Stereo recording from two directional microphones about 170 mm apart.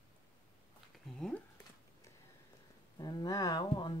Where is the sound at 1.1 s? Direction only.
5° left (ahead or behind).